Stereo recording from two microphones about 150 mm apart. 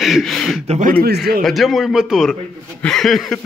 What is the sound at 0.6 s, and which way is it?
Speech, 50° right (ahead or behind).